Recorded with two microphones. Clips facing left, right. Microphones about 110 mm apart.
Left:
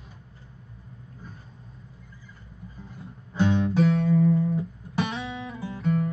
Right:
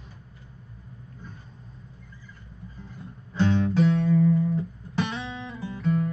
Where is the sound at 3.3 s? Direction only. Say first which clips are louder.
Even; 10° left (ahead or behind).